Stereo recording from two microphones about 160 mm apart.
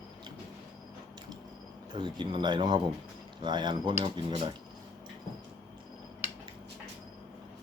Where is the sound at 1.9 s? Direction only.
30° right (ahead or behind).